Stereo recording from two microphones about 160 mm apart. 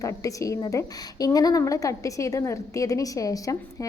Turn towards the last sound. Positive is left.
turn(degrees=20)  # may be behind; listen again after turning